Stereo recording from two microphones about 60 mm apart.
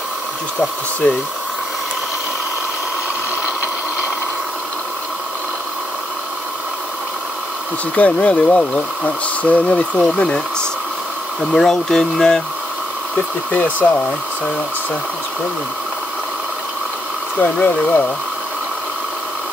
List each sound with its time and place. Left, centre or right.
1.0 s speech: left
7.9 s speech: left
11.5 s speech: centre
17.4 s speech: left